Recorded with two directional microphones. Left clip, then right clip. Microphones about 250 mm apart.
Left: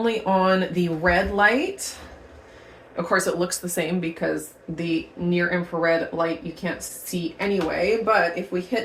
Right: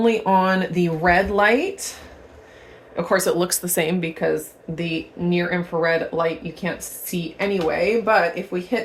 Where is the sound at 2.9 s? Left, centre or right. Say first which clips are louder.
Right 3 dB; right.